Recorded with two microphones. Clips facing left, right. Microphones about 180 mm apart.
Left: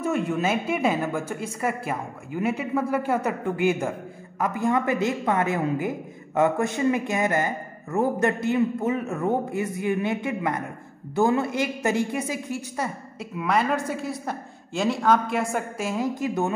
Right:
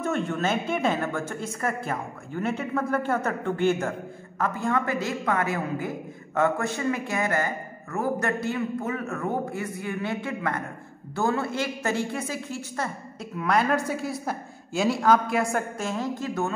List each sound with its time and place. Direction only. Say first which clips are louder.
0.0 s a woman's voice: left 2 dB; 10° left (ahead or behind)